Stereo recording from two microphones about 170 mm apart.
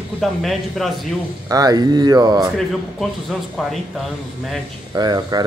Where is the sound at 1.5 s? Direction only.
20° right (ahead or behind).